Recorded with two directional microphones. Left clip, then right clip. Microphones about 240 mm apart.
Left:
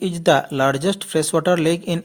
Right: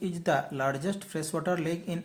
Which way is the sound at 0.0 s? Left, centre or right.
Left.